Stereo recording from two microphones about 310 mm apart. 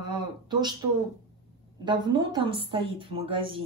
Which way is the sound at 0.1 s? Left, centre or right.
Centre.